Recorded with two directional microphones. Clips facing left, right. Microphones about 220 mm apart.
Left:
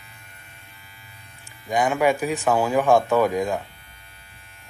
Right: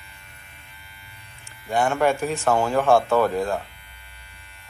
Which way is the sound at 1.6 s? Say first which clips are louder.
Left 1 dB; 15° left (ahead or behind).